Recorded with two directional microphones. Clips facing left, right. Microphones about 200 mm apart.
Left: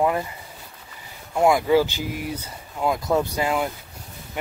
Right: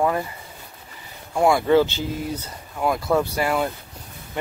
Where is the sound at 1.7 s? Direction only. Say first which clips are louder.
Right 2 dB; 10° left (ahead or behind).